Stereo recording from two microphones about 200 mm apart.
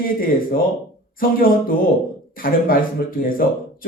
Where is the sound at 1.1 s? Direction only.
45° left (ahead or behind).